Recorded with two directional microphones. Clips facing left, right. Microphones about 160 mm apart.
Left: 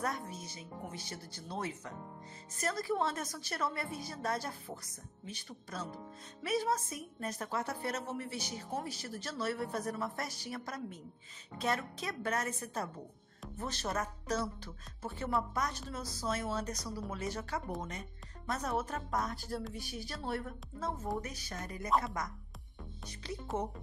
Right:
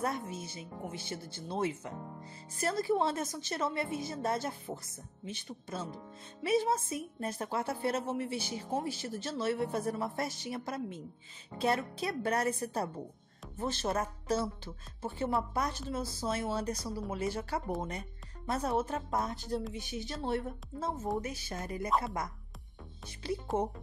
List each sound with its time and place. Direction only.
0.0 s a woman's voice: 25° right (ahead or behind)